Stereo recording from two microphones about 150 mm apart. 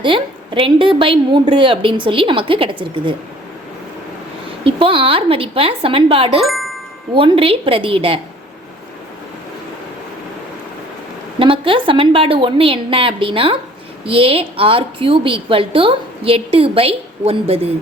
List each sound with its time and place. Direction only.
0.0 s a woman's voice: 35° right (ahead or behind)
4.6 s a woman's voice: 35° right (ahead or behind)
6.4 s music: centre (ahead or behind)
7.1 s a woman's voice: 35° right (ahead or behind)
11.3 s a woman's voice: 35° right (ahead or behind)